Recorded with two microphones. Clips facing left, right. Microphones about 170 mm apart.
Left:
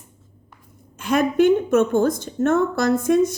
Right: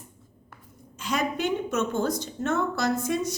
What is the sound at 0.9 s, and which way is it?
A woman's voice, 55° left (ahead or behind).